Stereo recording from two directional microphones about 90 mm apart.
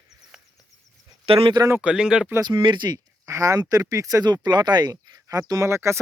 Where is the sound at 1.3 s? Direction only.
90° right.